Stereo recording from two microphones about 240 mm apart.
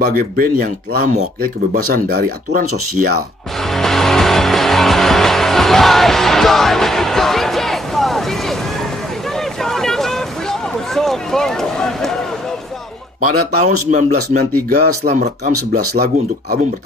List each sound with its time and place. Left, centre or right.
0.0 s speech: right
3.6 s music: centre
9.3 s boat: centre
13.2 s speech: right